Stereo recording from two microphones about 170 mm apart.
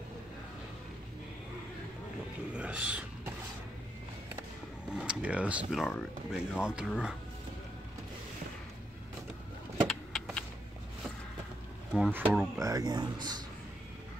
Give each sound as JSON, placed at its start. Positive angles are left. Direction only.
{"t": 2.5, "sound": "speech", "side_deg": -5}
{"t": 4.9, "sound": "speech", "side_deg": -5}
{"t": 9.8, "sound": "vehicle", "side_deg": 0}
{"t": 11.9, "sound": "speech", "side_deg": -10}